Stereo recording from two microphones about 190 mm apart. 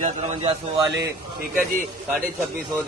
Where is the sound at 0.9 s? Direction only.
65° right (ahead or behind).